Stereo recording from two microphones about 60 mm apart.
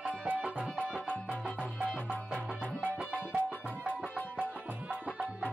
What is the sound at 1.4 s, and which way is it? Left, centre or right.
Music, centre.